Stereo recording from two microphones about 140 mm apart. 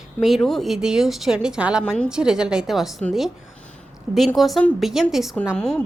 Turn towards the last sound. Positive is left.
turn(degrees=5)  # may be behind; listen again after turning